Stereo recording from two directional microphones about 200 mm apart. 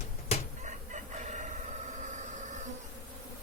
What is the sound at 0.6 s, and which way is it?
Chicken, 40° right (ahead or behind).